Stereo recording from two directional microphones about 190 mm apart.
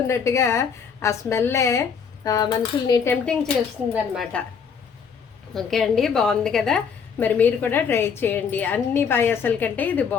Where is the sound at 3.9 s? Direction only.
Centre (ahead or behind).